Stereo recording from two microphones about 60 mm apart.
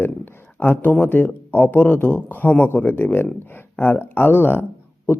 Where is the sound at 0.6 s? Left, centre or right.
Left.